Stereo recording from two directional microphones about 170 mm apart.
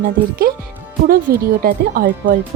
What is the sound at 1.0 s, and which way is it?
Speech, 60° right (ahead or behind).